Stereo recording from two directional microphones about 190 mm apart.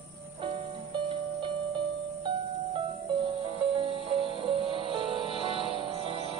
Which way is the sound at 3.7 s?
30° right (ahead or behind).